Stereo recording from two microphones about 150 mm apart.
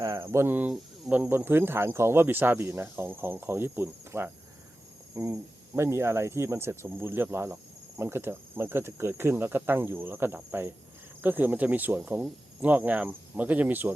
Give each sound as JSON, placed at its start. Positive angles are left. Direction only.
{"t": 0.0, "sound": "speech", "side_deg": -20}